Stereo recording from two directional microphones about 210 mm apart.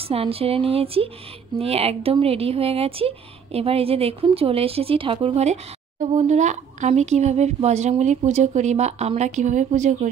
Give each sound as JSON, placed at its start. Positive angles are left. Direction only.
{"t": 0.1, "sound": "a woman's voice", "side_deg": -25}